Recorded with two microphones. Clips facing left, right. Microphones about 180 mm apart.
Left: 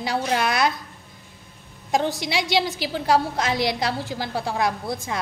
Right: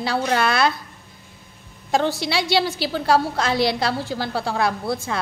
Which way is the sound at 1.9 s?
15° left (ahead or behind).